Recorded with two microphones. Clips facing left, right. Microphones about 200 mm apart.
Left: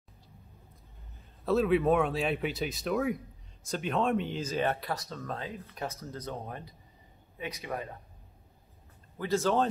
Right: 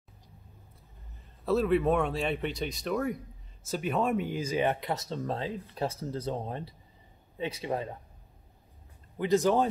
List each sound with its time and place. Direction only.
1.4 s speech: centre (ahead or behind); by 7.9 s 25° right (ahead or behind)
9.2 s speech: 15° right (ahead or behind)